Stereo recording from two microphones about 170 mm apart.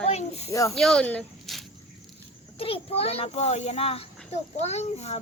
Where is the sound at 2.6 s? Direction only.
35° left (ahead or behind).